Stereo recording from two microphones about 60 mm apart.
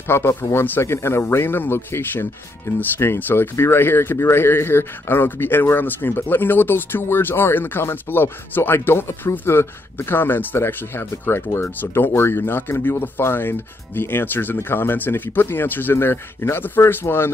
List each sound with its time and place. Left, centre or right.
0.1 s speech: left
13.2 s speech: left